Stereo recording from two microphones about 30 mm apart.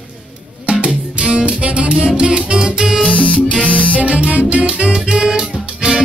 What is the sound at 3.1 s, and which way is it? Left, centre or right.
Music, left.